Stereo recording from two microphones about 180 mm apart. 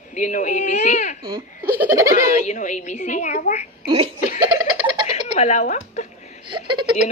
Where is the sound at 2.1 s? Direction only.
40° left (ahead or behind).